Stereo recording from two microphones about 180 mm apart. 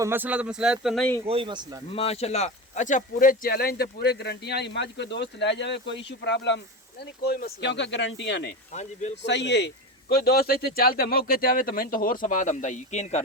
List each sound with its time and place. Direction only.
0.0 s speech: 10° right (ahead or behind)
1.3 s speech: 30° right (ahead or behind)
2.0 s a man's voice: 35° left (ahead or behind); by 6.6 s 75° left (ahead or behind)
7.0 s speech: 60° left (ahead or behind); by 8.5 s 80° left
8.7 s speech: 40° left (ahead or behind)
9.2 s a man's voice: 75° left (ahead or behind); by 13.2 s 40° left (ahead or behind)